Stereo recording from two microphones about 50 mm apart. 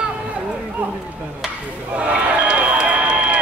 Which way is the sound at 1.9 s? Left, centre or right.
Right.